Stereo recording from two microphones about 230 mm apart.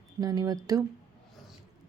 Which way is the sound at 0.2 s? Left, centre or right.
Centre.